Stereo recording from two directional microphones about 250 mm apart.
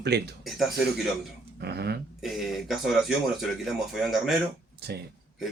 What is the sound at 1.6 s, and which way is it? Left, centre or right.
Speech, right.